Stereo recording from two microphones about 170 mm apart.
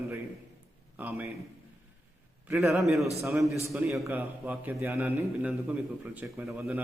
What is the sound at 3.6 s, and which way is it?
A man's voice, 10° right (ahead or behind).